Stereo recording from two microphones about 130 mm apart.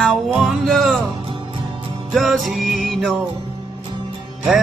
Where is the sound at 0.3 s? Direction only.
Centre (ahead or behind).